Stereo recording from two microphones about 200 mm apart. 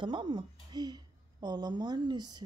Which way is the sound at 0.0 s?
25° right (ahead or behind).